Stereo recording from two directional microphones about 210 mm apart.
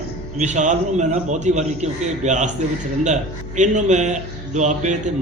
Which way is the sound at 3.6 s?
35° right (ahead or behind).